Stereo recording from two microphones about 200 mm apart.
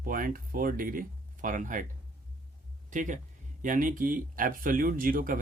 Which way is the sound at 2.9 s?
40° right (ahead or behind).